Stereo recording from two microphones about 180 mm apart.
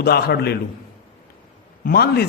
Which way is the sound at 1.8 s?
60° left (ahead or behind).